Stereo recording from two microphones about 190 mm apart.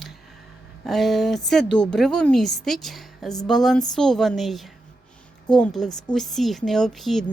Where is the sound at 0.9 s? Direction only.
Centre (ahead or behind).